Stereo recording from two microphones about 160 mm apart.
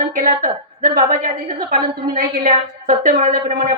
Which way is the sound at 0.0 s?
55° right (ahead or behind).